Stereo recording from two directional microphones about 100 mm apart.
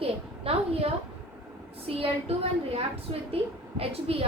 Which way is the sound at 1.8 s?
70° right (ahead or behind).